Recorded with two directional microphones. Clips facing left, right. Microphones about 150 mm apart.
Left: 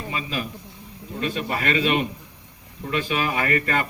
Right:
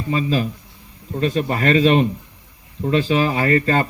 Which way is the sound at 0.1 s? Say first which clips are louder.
Right 11 dB; 35° right (ahead or behind).